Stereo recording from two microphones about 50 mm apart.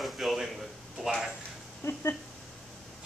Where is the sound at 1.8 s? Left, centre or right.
Left.